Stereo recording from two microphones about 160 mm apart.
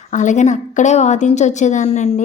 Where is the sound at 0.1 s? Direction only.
50° left (ahead or behind).